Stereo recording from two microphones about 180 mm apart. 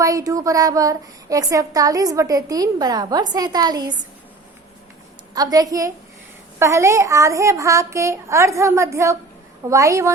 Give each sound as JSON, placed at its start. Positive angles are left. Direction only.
{"t": 0.0, "sound": "speech", "side_deg": -20}
{"t": 5.3, "sound": "a woman's voice", "side_deg": -20}